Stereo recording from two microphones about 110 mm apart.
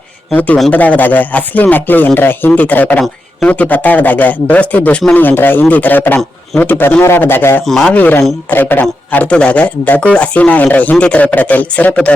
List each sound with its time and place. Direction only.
0.3 s a man's voice: 15° left (ahead or behind)
7.7 s speech: 5° left (ahead or behind)
7.9 s a man's voice: 15° left (ahead or behind)